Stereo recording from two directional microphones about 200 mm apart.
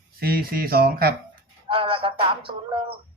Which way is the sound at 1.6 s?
25° right (ahead or behind).